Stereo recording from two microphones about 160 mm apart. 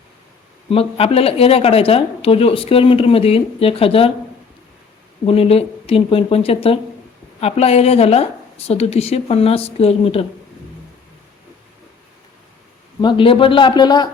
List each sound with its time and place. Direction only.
0.7 s speech: 35° left (ahead or behind)
5.2 s speech: 35° left (ahead or behind)
13.0 s speech: 30° left (ahead or behind)